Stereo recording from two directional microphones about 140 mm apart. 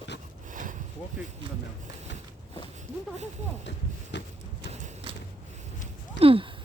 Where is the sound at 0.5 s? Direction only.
70° right (ahead or behind).